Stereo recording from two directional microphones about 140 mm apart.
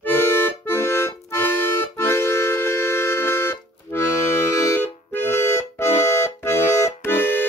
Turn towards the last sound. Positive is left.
turn(degrees=15)  # may be behind; listen again after turning